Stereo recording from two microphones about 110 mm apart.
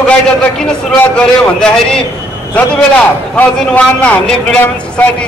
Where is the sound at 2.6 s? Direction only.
15° left (ahead or behind).